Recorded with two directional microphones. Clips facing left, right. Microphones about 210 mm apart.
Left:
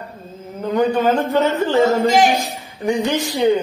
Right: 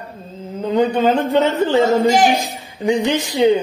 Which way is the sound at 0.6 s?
20° right (ahead or behind).